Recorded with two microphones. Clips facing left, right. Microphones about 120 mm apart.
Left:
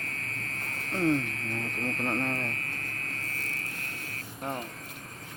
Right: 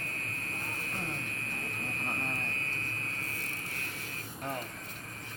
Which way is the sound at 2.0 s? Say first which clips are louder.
Left 8 dB; 75° left (ahead or behind).